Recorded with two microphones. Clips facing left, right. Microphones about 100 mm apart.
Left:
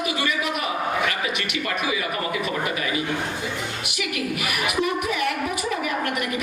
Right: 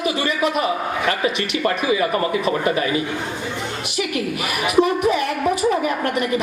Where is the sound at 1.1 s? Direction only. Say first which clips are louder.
Right 6 dB; 35° right (ahead or behind).